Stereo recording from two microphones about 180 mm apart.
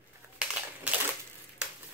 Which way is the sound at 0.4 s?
5° right (ahead or behind).